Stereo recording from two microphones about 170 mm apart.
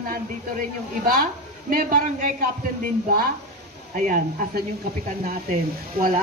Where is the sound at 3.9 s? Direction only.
55° right (ahead or behind).